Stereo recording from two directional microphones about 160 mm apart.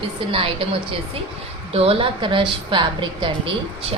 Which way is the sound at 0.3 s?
35° right (ahead or behind).